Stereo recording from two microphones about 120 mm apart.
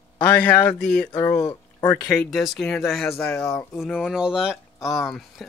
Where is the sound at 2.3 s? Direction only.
Centre (ahead or behind).